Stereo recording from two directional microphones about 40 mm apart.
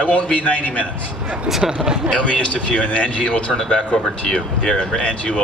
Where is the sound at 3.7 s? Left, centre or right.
Left.